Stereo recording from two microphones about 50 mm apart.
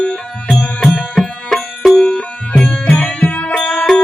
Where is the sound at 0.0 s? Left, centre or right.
Left.